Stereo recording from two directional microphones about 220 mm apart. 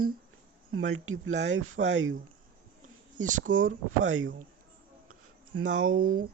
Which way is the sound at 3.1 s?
35° right (ahead or behind).